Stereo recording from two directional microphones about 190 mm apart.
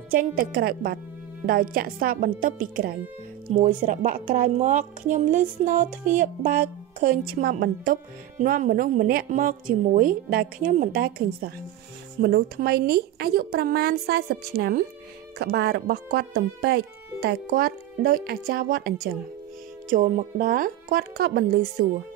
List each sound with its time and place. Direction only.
0.1 s speech: 50° right (ahead or behind)
19.9 s speech: 45° right (ahead or behind)